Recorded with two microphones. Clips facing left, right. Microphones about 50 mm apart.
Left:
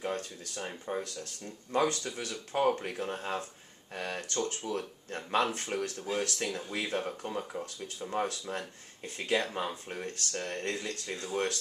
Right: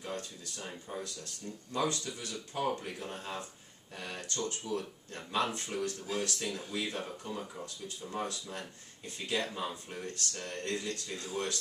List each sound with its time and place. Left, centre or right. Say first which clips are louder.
0.0 s speech: left 5 dB; left